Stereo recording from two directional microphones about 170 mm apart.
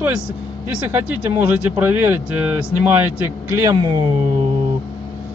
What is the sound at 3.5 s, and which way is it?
Speech, 20° right (ahead or behind).